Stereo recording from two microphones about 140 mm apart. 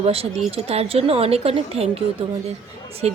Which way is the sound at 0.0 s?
45° right (ahead or behind).